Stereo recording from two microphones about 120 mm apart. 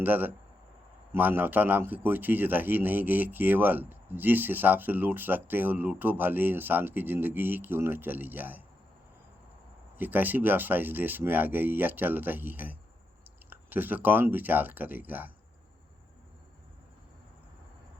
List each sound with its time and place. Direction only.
0.0 s a man's voice: 15° right (ahead or behind)
10.0 s a man's voice: 15° right (ahead or behind)